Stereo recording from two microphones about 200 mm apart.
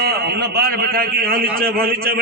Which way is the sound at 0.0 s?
50° right (ahead or behind).